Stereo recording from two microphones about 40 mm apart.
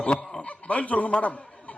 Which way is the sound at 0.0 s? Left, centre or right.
Left.